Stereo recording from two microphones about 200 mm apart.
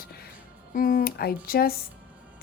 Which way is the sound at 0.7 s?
45° left (ahead or behind).